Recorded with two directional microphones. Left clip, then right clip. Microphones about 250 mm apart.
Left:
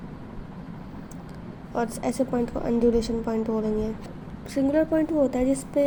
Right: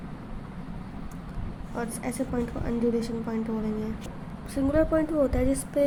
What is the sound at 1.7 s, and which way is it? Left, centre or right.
A woman's voice, centre.